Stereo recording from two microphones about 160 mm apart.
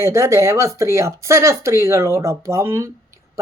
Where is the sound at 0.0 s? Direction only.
20° right (ahead or behind).